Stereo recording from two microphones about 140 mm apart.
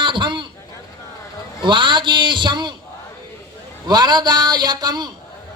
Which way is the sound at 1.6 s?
35° right (ahead or behind).